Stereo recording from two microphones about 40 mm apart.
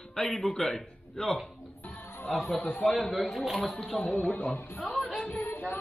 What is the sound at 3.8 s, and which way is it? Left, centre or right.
Speech, centre.